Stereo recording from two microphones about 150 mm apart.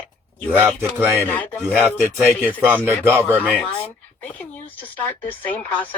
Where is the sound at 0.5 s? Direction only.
15° right (ahead or behind).